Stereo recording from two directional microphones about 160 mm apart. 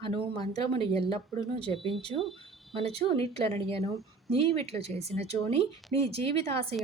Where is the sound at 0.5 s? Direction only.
40° right (ahead or behind).